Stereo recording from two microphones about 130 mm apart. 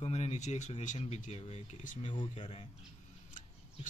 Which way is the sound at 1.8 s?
85° left.